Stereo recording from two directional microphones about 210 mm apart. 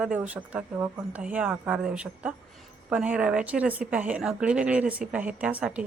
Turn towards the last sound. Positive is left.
turn(degrees=-5)  # may be behind; listen again after turning